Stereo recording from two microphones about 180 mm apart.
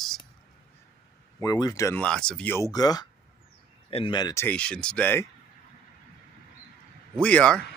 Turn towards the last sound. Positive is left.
turn(degrees=5)  # may be behind; listen again after turning